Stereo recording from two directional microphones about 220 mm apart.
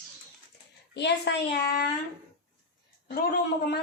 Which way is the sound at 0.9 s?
50° left (ahead or behind).